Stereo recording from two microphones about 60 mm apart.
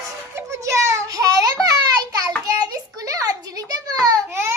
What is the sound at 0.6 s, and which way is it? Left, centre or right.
A child's voice, right.